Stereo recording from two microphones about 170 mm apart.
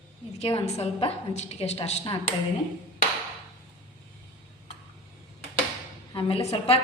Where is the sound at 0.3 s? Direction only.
35° left (ahead or behind).